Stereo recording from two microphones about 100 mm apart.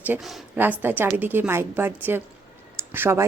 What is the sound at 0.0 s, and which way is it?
A woman's voice, 20° right (ahead or behind).